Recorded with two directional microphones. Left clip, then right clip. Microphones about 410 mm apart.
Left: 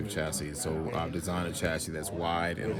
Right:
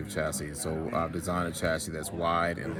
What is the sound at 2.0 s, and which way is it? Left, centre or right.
Speech, centre.